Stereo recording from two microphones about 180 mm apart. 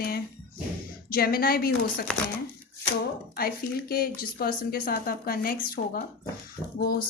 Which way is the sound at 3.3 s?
55° left (ahead or behind).